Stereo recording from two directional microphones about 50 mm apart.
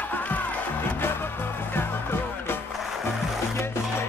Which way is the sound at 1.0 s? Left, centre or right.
Left.